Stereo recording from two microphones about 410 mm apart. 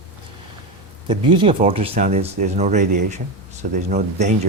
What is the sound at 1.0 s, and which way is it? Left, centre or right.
Speech, centre.